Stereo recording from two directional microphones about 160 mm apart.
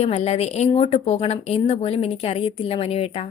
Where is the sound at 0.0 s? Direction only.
40° left (ahead or behind).